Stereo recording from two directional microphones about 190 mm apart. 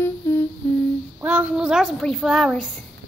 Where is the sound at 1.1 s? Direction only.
10° right (ahead or behind).